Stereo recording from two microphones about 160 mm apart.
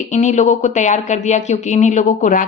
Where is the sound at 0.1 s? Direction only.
50° left (ahead or behind).